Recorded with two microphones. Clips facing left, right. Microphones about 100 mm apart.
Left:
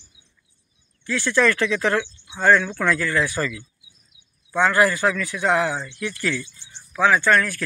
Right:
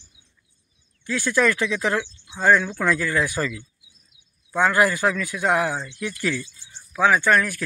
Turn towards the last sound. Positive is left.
turn(degrees=-15)  # may be behind; listen again after turning